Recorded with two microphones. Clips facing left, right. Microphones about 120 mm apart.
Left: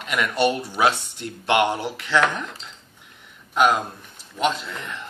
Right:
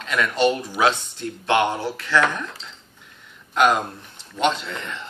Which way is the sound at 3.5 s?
5° left (ahead or behind).